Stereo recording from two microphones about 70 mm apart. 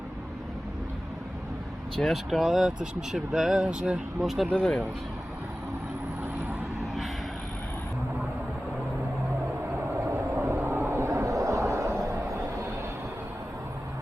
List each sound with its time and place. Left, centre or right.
2.0 s speech: centre
4.2 s speech: centre
10.0 s vehicle: right